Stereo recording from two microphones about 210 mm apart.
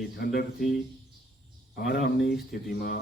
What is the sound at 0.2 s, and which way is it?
A man's voice, 45° left (ahead or behind).